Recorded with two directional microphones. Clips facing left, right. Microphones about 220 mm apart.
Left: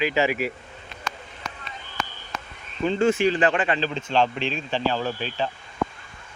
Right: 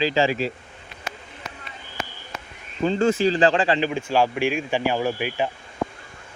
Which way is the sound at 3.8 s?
10° right (ahead or behind).